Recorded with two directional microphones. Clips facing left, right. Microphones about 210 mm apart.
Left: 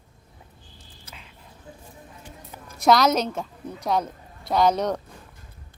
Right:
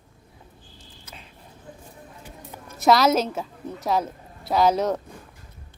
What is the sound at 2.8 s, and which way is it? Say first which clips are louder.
A woman's voice: right 1 dB; centre (ahead or behind).